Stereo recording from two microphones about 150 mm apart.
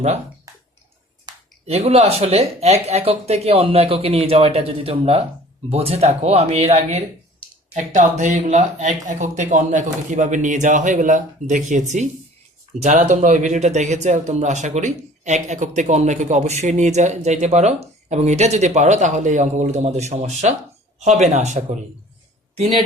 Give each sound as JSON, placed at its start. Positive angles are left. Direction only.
{"t": 1.3, "sound": "finger snapping", "side_deg": -30}
{"t": 1.6, "sound": "speech", "side_deg": -45}
{"t": 7.7, "sound": "speech", "side_deg": -55}